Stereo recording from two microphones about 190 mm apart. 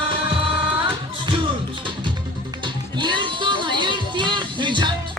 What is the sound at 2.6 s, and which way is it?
Music, 25° right (ahead or behind).